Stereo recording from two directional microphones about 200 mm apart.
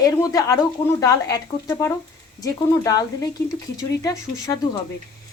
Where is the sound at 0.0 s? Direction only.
20° left (ahead or behind).